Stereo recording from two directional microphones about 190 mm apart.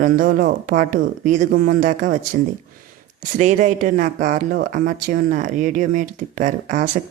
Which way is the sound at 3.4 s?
40° right (ahead or behind).